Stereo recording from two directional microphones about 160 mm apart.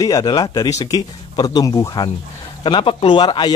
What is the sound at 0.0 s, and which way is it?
Speech, 25° left (ahead or behind).